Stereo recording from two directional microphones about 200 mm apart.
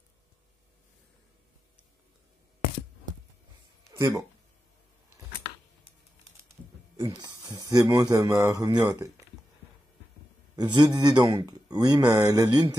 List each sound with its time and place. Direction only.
3.9 s a sound: 15° right (ahead or behind)
7.0 s speech: 20° right (ahead or behind)
10.5 s speech: 20° right (ahead or behind)